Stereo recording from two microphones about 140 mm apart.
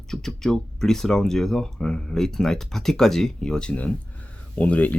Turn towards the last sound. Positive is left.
turn(degrees=10)  # may be behind; listen again after turning